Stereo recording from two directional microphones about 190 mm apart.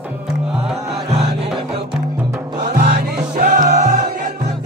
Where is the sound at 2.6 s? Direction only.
45° right (ahead or behind).